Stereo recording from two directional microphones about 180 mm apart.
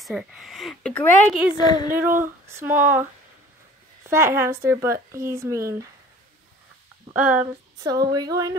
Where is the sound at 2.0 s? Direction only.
10° right (ahead or behind).